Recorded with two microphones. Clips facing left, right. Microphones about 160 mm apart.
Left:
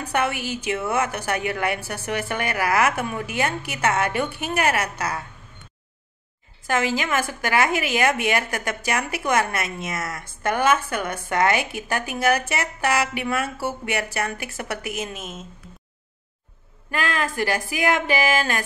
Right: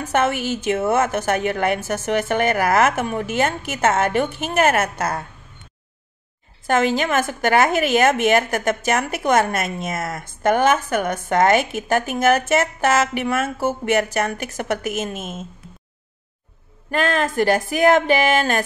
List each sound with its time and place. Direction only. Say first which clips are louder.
0.0 s a woman's voice: right 4 dB; 45° right (ahead or behind)
7.1 s a woman's voice: right 5 dB; 45° right (ahead or behind)
17.2 s a woman's voice: right 6 dB; 45° right (ahead or behind)